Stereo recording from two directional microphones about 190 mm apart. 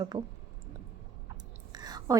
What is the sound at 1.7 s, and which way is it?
Whispering, 20° right (ahead or behind).